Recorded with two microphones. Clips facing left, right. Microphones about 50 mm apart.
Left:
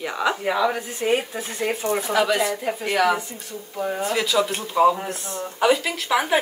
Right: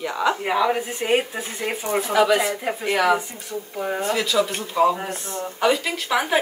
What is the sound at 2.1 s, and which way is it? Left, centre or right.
Speech, centre.